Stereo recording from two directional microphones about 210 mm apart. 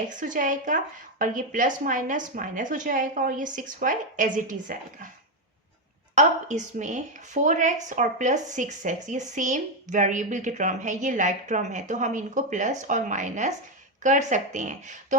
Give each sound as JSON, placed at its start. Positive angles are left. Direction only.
{"t": 0.1, "sound": "a woman's voice", "side_deg": -40}
{"t": 6.1, "sound": "a woman's voice", "side_deg": -35}